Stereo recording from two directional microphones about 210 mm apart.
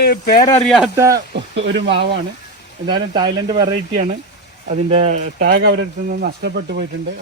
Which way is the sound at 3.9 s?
40° right (ahead or behind).